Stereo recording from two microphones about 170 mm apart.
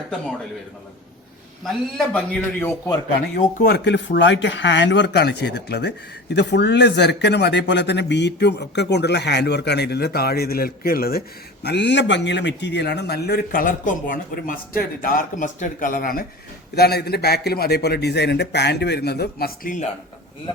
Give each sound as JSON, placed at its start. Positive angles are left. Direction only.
{"t": 1.6, "sound": "a man's voice", "side_deg": 5}
{"t": 3.3, "sound": "speech", "side_deg": 65}
{"t": 6.3, "sound": "speech", "side_deg": 90}
{"t": 11.6, "sound": "a man's voice", "side_deg": 85}
{"t": 16.7, "sound": "speech", "side_deg": 70}